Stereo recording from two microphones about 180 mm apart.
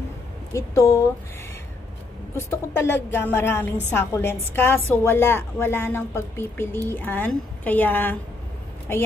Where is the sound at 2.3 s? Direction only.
15° left (ahead or behind).